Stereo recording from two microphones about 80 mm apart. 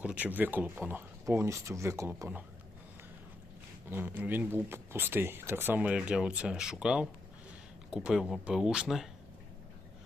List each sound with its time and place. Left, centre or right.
0.0 s speech: centre
1.2 s speech: right
3.8 s speech: right
5.9 s speech: centre